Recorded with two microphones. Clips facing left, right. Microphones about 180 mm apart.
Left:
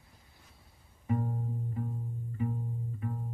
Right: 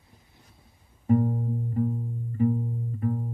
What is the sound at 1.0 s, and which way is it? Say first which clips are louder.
Music: right 10 dB; 45° right (ahead or behind).